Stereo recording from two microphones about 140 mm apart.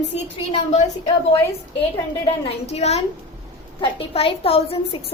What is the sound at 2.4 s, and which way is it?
A woman's voice, 50° left (ahead or behind).